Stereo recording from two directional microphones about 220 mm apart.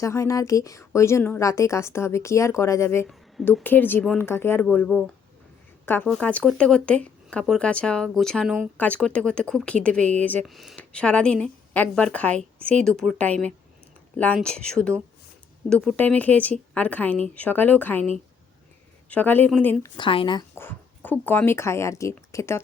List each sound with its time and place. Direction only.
0.0 s a woman's voice: 15° left (ahead or behind)
19.1 s a woman's voice: 10° left (ahead or behind)
20.0 s speech: 20° left (ahead or behind)
20.6 s a woman's voice: 10° left (ahead or behind)